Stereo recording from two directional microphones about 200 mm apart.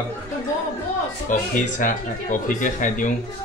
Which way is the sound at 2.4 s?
40° left (ahead or behind).